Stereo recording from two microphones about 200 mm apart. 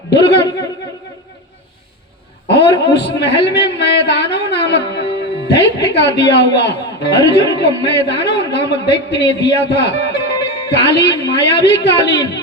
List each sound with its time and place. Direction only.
2.5 s a man's voice: 60° left (ahead or behind)